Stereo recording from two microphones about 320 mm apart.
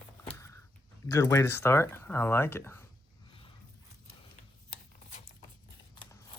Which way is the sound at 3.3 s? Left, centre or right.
Centre.